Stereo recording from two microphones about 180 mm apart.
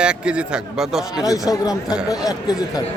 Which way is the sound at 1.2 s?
20° left (ahead or behind).